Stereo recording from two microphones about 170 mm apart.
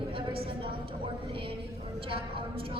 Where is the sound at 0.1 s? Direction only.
30° right (ahead or behind).